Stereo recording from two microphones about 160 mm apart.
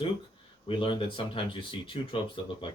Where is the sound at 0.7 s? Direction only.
30° left (ahead or behind).